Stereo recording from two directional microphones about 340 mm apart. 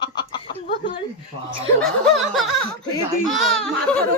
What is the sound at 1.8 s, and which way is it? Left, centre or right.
Snicker, centre.